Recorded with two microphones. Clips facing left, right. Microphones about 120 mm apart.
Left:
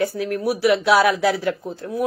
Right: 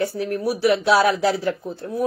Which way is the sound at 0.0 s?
30° right (ahead or behind).